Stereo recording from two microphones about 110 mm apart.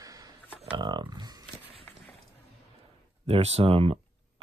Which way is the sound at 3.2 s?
70° right (ahead or behind).